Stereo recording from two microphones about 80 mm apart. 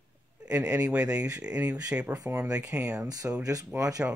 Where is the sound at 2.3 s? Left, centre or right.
Right.